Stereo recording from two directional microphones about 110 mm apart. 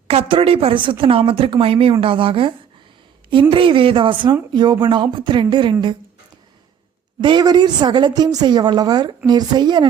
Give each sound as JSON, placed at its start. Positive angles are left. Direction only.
{"t": 0.1, "sound": "speech", "side_deg": -60}
{"t": 7.2, "sound": "a woman's voice", "side_deg": -45}